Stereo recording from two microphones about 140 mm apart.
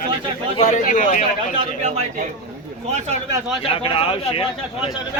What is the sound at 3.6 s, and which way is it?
Speech, 40° left (ahead or behind).